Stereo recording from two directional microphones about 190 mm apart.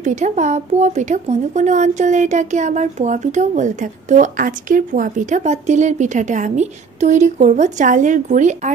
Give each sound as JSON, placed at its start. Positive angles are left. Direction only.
{"t": 0.0, "sound": "speech", "side_deg": -40}